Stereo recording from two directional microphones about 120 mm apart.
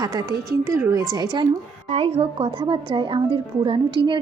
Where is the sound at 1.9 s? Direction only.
55° right (ahead or behind).